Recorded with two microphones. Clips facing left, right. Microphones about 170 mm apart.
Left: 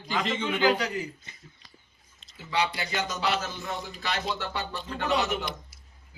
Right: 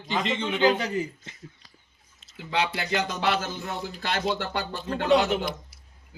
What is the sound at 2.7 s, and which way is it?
Speech, 55° right (ahead or behind).